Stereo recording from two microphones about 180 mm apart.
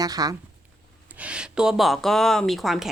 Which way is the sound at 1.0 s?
10° right (ahead or behind).